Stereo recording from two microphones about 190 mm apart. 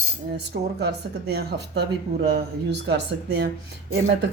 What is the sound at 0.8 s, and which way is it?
Speech, 60° right (ahead or behind).